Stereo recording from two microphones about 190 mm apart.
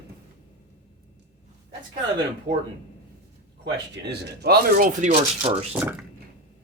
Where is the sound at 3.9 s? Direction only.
60° right (ahead or behind).